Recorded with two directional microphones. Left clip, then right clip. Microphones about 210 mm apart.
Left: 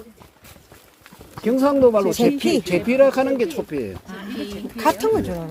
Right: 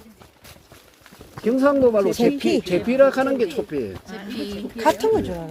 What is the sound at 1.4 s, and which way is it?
Speech, 20° left (ahead or behind).